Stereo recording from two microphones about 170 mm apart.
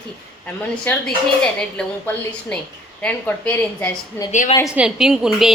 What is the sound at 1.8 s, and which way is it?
Speech, 5° left (ahead or behind).